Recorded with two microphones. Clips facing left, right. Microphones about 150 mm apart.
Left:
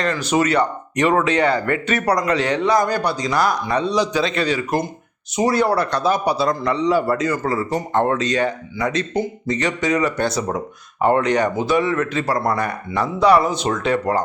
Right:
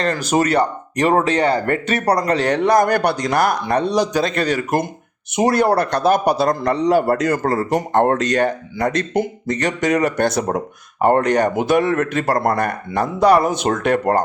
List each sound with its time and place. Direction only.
0.0 s speech: 40° right (ahead or behind)
2.5 s speech: 50° right (ahead or behind)